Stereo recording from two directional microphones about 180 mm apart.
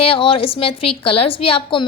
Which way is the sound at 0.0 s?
30° left (ahead or behind).